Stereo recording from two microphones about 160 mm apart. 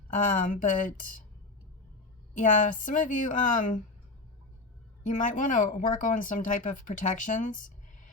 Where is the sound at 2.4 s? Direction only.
55° left (ahead or behind).